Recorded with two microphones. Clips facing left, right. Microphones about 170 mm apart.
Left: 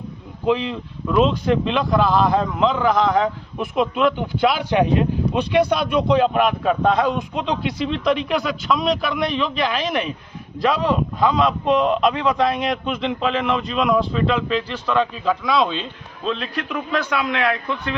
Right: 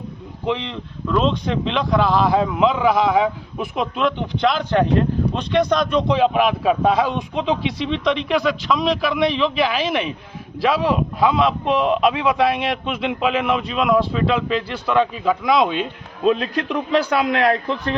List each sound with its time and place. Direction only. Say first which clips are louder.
0.4 s speech: left 4 dB; 5° left (ahead or behind)
15.4 s speech: right 3 dB; 15° right (ahead or behind)
16.9 s a man's voice: right 4 dB; 35° right (ahead or behind)